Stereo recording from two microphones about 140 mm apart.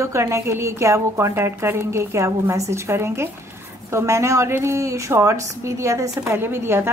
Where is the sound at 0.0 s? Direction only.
20° right (ahead or behind).